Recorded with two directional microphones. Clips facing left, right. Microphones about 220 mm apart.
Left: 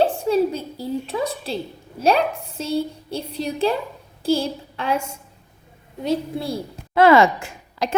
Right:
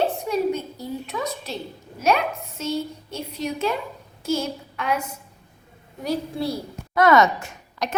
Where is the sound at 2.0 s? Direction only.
30° left (ahead or behind).